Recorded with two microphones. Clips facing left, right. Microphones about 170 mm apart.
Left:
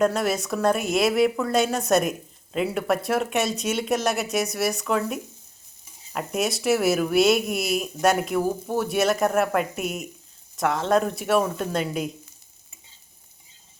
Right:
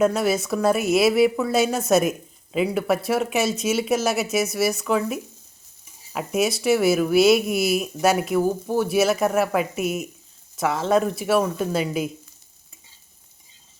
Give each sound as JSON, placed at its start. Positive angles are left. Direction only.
{"t": 0.0, "sound": "a woman's voice", "side_deg": 0}